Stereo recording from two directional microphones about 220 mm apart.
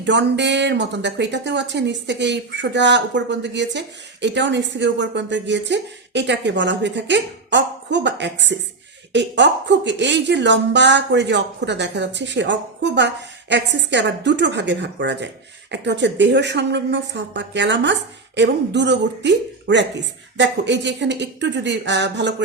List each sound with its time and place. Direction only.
0.0 s speech: 55° right (ahead or behind)